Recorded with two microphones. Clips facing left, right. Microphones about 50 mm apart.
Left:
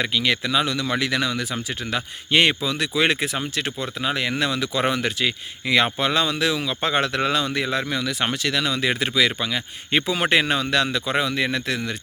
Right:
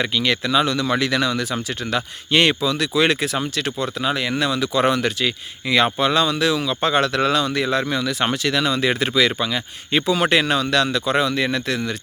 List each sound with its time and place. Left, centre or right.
0.0 s speech: centre
7.9 s speech: centre
9.9 s speech: left